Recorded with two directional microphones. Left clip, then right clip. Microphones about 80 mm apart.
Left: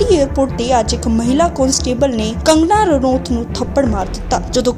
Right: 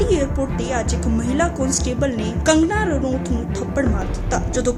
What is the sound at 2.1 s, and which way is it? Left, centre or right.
Speech, left.